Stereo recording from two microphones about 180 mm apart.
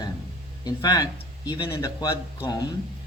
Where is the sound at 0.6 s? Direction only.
20° left (ahead or behind).